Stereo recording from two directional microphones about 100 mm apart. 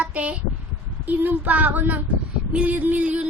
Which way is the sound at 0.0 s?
10° right (ahead or behind).